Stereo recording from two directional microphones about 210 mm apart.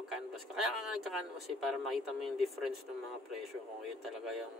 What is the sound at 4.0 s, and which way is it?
Speech, centre (ahead or behind).